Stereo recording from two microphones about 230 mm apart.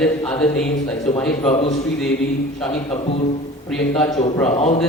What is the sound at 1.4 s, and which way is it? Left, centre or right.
Speech, left.